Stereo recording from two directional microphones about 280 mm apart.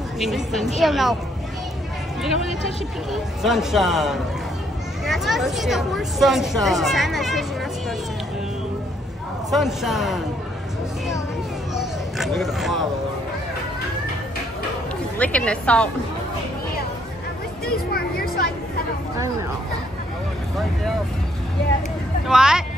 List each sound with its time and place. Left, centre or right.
0.2 s speech: centre
3.1 s speech: centre
9.5 s speech: centre
11.7 s a sound: centre
15.1 s speech: centre
17.9 s a sound: left
22.3 s speech: centre